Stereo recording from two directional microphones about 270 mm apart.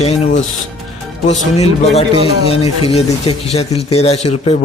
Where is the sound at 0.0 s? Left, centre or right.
Left.